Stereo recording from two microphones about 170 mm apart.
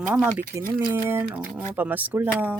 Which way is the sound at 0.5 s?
20° right (ahead or behind).